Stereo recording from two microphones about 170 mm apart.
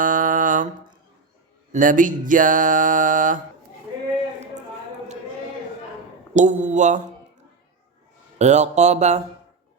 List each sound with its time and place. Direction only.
0.0 s a sound: 50° right (ahead or behind)
1.7 s music: 50° right (ahead or behind)
6.3 s music: 45° right (ahead or behind)
8.4 s speech: 40° right (ahead or behind)